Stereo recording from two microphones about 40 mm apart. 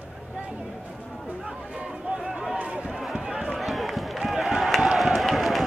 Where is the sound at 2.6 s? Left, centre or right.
Right.